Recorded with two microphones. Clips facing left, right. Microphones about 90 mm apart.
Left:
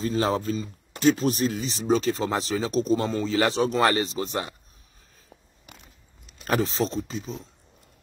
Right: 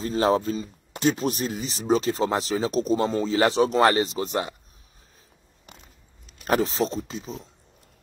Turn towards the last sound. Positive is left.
turn(degrees=-15)  # may be behind; listen again after turning